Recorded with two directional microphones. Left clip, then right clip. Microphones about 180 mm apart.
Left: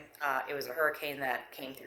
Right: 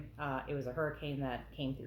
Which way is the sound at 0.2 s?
35° left (ahead or behind).